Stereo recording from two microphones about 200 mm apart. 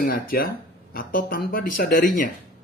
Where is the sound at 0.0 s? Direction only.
45° left (ahead or behind).